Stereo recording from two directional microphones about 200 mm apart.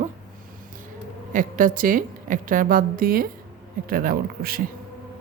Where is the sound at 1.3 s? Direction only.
45° right (ahead or behind).